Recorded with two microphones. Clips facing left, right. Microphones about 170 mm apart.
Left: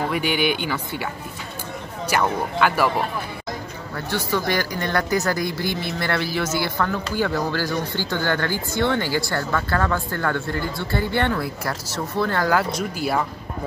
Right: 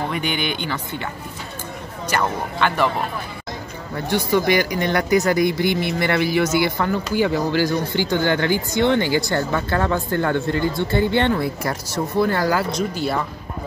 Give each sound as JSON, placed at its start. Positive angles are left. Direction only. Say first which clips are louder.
{"t": 0.1, "sound": "speech", "louder": "left 2 dB", "side_deg": 5}
{"t": 3.9, "sound": "speech", "louder": "right 5 dB", "side_deg": -20}
{"t": 12.7, "sound": "speech", "louder": "right 1 dB", "side_deg": 10}